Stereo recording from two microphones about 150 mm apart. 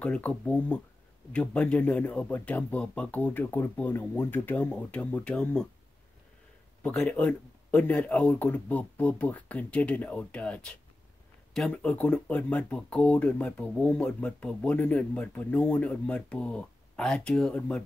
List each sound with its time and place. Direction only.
0.0 s speech: 10° left (ahead or behind)
6.8 s speech: 5° left (ahead or behind)